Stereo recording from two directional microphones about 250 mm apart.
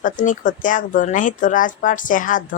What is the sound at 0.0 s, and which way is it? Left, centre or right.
Speech, left.